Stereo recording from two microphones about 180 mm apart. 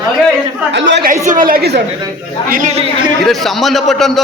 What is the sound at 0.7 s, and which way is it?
Speech, 80° right.